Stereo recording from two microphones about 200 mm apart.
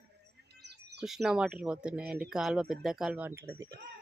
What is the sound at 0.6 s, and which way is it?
Bird, 55° right (ahead or behind).